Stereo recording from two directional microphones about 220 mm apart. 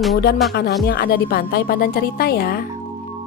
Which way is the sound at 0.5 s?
45° left (ahead or behind).